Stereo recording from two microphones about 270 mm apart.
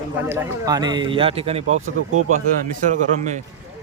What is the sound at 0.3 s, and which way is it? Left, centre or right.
A man's voice, centre.